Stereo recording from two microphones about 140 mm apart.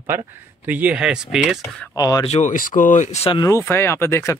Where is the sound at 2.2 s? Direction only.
55° left (ahead or behind).